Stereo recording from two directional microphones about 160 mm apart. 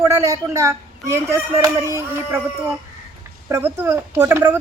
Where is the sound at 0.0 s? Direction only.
20° right (ahead or behind).